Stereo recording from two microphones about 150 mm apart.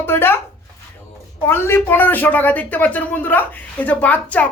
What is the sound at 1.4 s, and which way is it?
A woman's voice, 15° left (ahead or behind).